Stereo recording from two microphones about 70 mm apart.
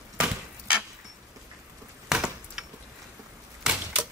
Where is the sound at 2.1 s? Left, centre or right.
Centre.